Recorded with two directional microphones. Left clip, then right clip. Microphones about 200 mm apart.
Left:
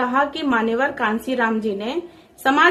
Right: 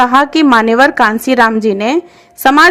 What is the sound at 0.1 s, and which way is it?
A woman's voice, 50° right (ahead or behind).